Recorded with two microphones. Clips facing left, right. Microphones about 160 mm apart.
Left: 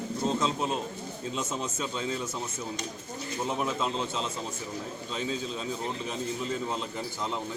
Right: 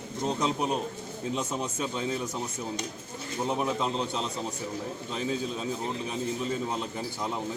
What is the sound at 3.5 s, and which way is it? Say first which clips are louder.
Speech: right 2 dB; 15° right (ahead or behind).